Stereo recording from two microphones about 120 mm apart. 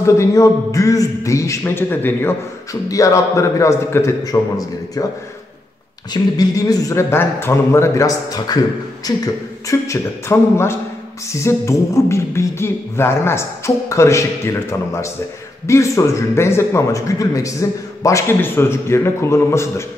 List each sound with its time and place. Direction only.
0.0 s speech: 25° left (ahead or behind)
6.1 s speech: 30° left (ahead or behind)